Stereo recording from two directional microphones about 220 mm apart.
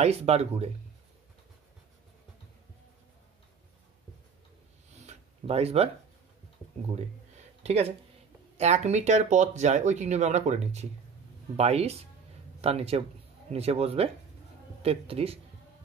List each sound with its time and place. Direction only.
0.0 s speech: 30° right (ahead or behind)
5.0 s a sound: 25° right (ahead or behind)
7.6 s speech: 30° right (ahead or behind)